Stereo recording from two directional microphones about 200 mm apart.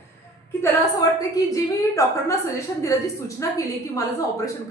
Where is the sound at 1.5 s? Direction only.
15° left (ahead or behind).